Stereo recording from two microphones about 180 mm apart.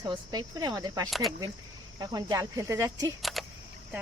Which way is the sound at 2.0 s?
20° right (ahead or behind).